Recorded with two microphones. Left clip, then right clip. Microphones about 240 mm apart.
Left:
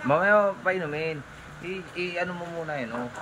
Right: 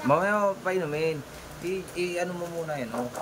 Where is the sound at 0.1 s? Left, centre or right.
Centre.